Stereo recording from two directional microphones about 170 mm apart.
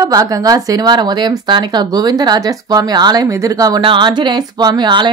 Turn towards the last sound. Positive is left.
turn(degrees=-25)  # may be behind; listen again after turning